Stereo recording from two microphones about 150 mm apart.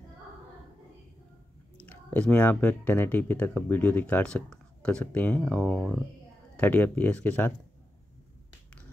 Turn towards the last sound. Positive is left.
turn(degrees=10)  # may be behind; listen again after turning